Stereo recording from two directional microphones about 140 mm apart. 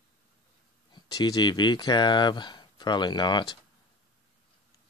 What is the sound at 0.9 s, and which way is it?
Speech, 30° left (ahead or behind).